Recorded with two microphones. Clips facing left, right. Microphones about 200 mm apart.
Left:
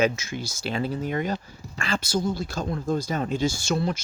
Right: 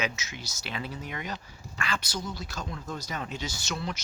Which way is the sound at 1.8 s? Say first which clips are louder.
Left 9 dB; 30° left (ahead or behind).